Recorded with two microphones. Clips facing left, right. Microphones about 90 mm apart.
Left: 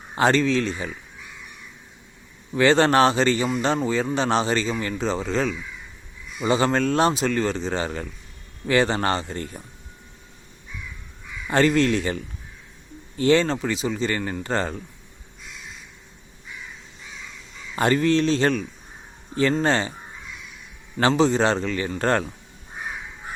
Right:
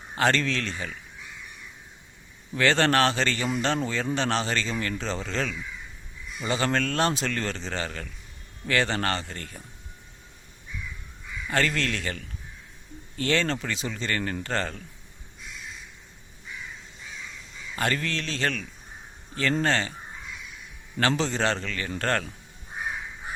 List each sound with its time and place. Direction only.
0.2 s speech: 10° left (ahead or behind)
2.5 s speech: 15° left (ahead or behind)
11.4 s speech: 20° left (ahead or behind)
17.7 s speech: 20° left (ahead or behind)
19.6 s speech: 20° left (ahead or behind)
21.0 s speech: 15° left (ahead or behind)